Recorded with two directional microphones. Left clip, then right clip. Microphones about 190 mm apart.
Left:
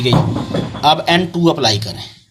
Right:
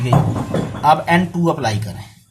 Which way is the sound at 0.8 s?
25° left (ahead or behind).